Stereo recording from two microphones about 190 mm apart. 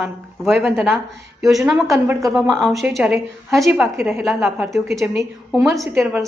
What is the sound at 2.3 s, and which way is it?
A woman's voice, centre (ahead or behind).